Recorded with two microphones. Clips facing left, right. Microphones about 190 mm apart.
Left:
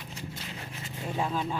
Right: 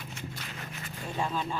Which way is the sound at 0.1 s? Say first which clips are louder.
Left 4 dB; 30° left (ahead or behind).